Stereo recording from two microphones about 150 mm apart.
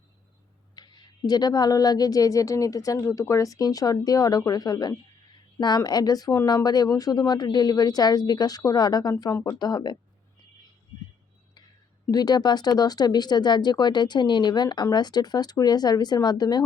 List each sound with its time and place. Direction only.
0.8 s speech: 25° left (ahead or behind)
12.1 s speech: 25° left (ahead or behind)